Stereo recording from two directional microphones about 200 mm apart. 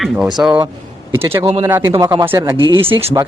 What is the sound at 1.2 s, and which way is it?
Speech, 10° right (ahead or behind).